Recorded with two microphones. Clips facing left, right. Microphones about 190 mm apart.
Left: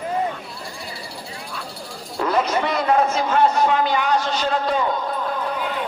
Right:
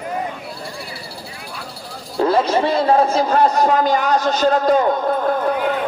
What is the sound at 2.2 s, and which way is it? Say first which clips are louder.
A man's voice: right 5 dB; 30° right (ahead or behind).